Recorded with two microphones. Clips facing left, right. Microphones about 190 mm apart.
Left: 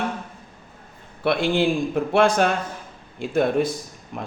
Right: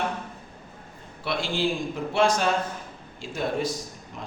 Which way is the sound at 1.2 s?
60° left (ahead or behind).